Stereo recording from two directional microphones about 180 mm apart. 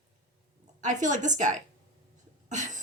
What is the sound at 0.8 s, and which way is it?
Speech, 45° right (ahead or behind).